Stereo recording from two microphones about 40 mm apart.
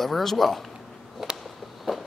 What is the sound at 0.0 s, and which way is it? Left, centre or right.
Speech, centre.